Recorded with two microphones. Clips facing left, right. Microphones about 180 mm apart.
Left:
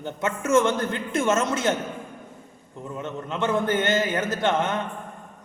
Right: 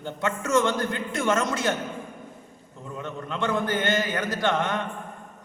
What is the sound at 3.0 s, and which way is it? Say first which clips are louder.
A man's voice: left 2 dB; 20° left (ahead or behind).